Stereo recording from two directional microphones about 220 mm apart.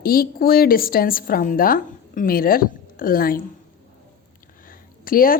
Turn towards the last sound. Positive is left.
turn(degrees=40)  # may be behind; listen again after turning